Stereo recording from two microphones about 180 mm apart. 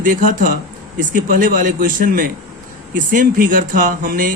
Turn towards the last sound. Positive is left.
turn(degrees=-50)  # may be behind; listen again after turning